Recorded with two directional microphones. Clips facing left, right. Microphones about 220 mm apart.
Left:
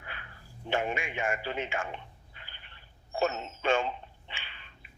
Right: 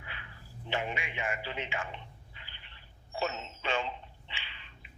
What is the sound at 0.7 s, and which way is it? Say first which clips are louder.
Telephone: left 4 dB; 50° left (ahead or behind).